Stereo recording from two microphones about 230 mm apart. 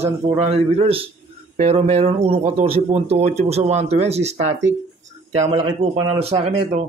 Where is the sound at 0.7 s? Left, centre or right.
Right.